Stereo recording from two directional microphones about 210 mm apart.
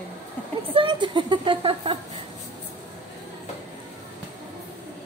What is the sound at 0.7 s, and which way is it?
Speech, 20° right (ahead or behind).